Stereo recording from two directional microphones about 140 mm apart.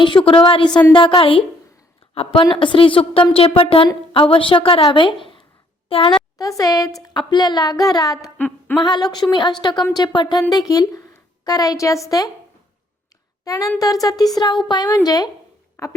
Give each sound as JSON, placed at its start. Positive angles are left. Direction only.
{"t": 0.0, "sound": "a woman's voice", "side_deg": 40}
{"t": 6.4, "sound": "speech", "side_deg": 25}
{"t": 8.4, "sound": "a sound", "side_deg": 10}
{"t": 8.8, "sound": "a woman's voice", "side_deg": 30}
{"t": 13.4, "sound": "speech", "side_deg": 25}